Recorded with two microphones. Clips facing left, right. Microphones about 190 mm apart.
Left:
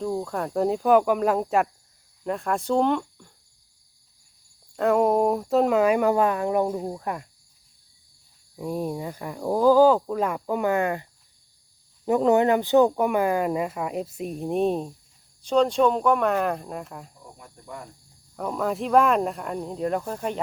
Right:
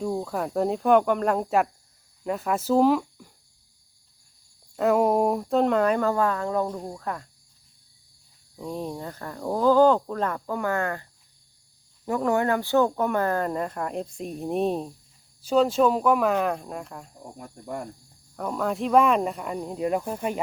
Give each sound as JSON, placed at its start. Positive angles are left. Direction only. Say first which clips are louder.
{"t": 0.0, "sound": "speech", "louder": "even", "side_deg": -5}
{"t": 4.8, "sound": "speech", "louder": "left 1 dB", "side_deg": 0}
{"t": 8.5, "sound": "speech", "louder": "left 4 dB", "side_deg": 10}
{"t": 17.3, "sound": "speech", "louder": "right 6 dB", "side_deg": -45}
{"t": 18.3, "sound": "speech", "louder": "left 1 dB", "side_deg": 0}